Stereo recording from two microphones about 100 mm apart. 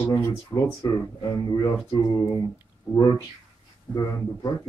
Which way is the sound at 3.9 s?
40° left (ahead or behind).